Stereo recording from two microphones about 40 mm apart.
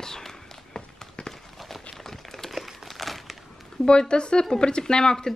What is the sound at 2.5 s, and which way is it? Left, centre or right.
Crumpling, centre.